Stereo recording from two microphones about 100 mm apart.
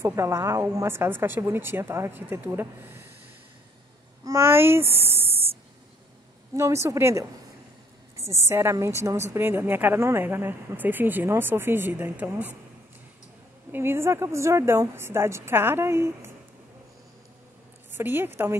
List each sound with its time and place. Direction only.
0.0 s a woman's voice: 30° right (ahead or behind)
4.2 s speech: 30° right (ahead or behind)
6.5 s a woman's voice: 30° right (ahead or behind)
13.7 s a woman's voice: 25° right (ahead or behind)
17.9 s a woman's voice: 20° right (ahead or behind)